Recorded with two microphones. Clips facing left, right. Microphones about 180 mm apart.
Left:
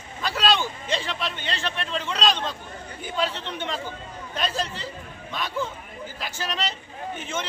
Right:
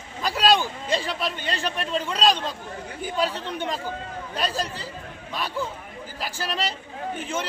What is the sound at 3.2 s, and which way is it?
Speech, 40° right (ahead or behind).